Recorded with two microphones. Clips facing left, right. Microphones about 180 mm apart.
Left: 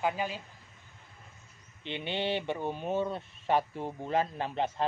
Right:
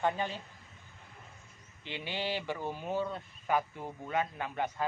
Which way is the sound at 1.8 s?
25° left (ahead or behind).